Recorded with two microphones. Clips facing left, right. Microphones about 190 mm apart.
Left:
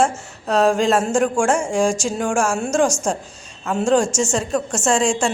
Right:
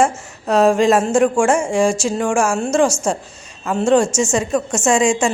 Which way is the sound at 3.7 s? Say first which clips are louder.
Right 3 dB; centre (ahead or behind).